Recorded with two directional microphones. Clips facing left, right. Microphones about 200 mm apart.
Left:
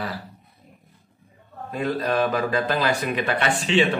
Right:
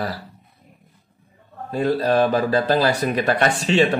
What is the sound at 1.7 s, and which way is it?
Speech, 35° right (ahead or behind).